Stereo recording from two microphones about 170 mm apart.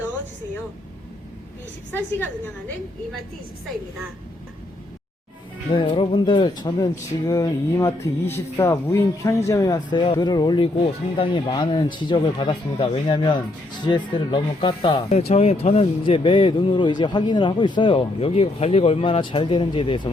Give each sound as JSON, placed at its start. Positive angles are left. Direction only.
{"t": 1.9, "sound": "speech", "side_deg": 10}
{"t": 5.7, "sound": "speech", "side_deg": 30}